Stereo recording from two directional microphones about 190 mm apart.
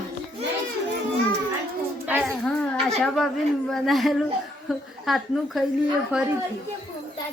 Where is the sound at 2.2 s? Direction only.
5° left (ahead or behind).